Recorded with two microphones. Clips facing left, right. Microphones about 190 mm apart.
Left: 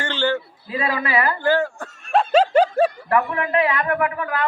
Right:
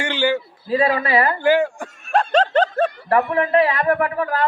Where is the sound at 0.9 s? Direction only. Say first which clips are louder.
Right 3 dB; 35° right (ahead or behind).